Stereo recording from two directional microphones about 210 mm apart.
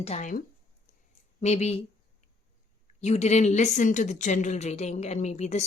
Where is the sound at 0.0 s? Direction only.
35° left (ahead or behind).